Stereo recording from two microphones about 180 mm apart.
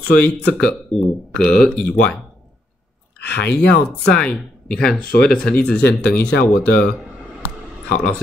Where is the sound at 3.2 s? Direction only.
70° left (ahead or behind).